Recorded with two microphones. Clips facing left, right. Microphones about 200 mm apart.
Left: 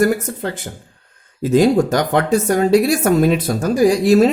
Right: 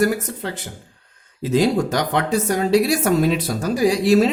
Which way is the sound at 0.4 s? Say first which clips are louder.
Left 4 dB; 50° left (ahead or behind).